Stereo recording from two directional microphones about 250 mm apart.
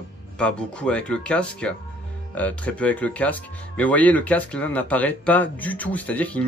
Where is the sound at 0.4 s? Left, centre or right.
Centre.